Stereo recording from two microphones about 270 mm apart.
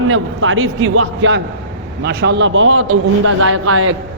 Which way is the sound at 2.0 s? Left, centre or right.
Right.